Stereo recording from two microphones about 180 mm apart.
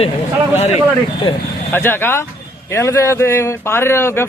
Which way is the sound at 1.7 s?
10° left (ahead or behind).